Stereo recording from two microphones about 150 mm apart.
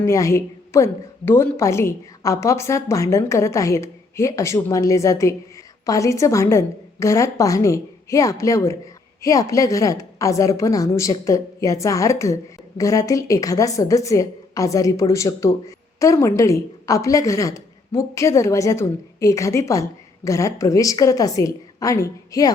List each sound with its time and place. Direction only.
0.0 s a woman's voice: 20° left (ahead or behind)